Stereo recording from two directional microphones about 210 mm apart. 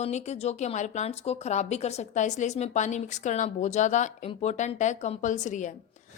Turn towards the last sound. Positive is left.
turn(degrees=35)  # may be behind; listen again after turning